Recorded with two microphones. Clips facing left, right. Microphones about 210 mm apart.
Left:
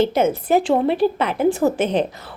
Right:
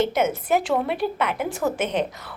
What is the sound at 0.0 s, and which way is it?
A woman's voice, 30° left (ahead or behind).